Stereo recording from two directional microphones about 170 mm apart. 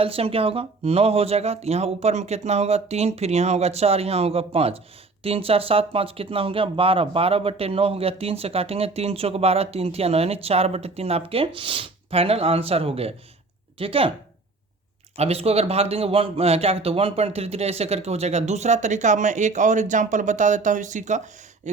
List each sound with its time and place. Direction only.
0.0 s speech: 35° right (ahead or behind)
15.1 s speech: 35° right (ahead or behind)